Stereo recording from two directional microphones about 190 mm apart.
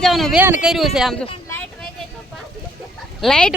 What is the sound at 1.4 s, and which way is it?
Vehicle, 10° left (ahead or behind).